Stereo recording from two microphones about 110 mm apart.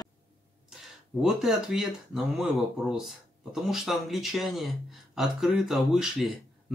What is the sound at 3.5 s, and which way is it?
Speech, centre (ahead or behind).